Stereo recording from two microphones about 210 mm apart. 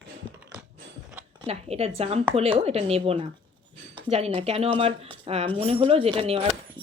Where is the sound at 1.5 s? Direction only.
30° right (ahead or behind).